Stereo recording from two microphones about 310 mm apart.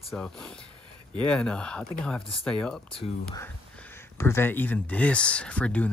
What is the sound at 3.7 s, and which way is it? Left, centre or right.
Speech, centre.